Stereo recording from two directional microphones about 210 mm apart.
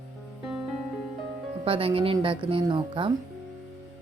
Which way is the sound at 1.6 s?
25° right (ahead or behind).